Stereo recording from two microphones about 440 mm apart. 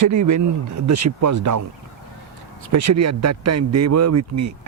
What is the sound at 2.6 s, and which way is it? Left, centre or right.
Speech, right.